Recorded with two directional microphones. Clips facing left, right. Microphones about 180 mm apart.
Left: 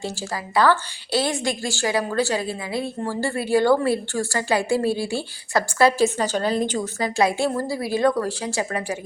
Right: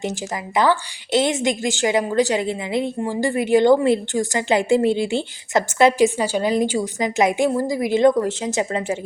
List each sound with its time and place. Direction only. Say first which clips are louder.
0.0 s a woman's voice: right 3 dB; 20° right (ahead or behind)